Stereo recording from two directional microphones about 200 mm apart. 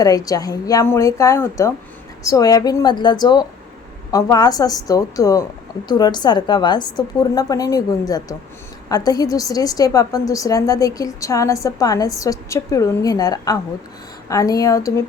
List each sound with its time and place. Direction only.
0.0 s a woman's voice: 20° left (ahead or behind)